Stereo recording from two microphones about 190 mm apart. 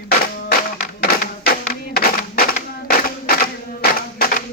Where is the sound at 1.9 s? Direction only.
55° left (ahead or behind).